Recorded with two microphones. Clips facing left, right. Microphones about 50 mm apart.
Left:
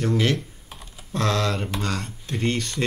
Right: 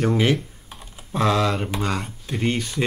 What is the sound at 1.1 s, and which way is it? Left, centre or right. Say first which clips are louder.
Speech: right 3 dB; centre.